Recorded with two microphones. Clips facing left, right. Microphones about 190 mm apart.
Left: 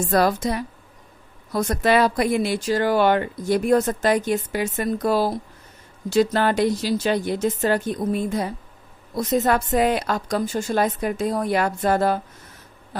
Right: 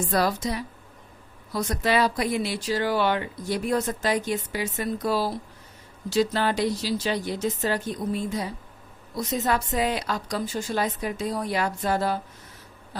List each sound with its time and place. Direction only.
0.1 s a woman's voice: 50° left (ahead or behind)